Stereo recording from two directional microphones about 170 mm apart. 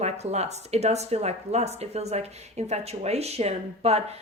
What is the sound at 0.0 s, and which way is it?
Speech, 40° right (ahead or behind).